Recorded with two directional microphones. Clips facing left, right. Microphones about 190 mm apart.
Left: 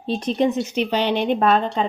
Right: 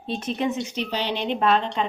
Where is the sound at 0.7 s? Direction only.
60° left (ahead or behind); by 1.8 s 45° left (ahead or behind).